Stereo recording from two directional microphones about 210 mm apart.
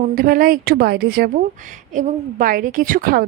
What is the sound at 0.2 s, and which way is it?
A woman's voice, 40° right (ahead or behind).